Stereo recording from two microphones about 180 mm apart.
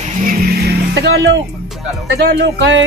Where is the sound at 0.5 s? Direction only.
65° right (ahead or behind); by 2.9 s 80° right.